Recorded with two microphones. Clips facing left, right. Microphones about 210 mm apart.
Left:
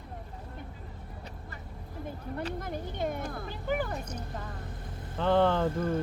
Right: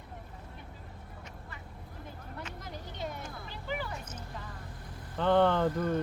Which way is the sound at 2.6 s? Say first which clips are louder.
Left 7 dB; 55° left (ahead or behind).